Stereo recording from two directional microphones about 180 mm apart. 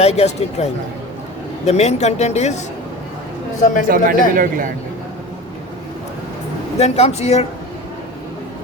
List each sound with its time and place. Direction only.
0.0 s speech: 35° left (ahead or behind)
3.8 s speech: 50° right (ahead or behind)
6.7 s speech: 35° left (ahead or behind)